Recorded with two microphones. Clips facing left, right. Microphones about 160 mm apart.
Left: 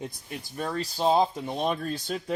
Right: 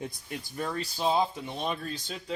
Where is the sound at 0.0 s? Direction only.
20° left (ahead or behind).